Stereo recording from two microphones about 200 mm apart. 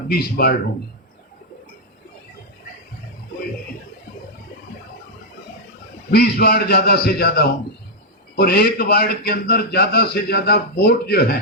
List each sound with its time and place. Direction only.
0.1 s a man's voice: 50° left (ahead or behind)
6.1 s a man's voice: 50° left (ahead or behind)